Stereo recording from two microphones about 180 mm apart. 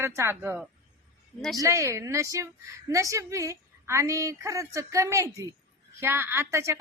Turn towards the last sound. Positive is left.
turn(degrees=-15)  # may be behind; listen again after turning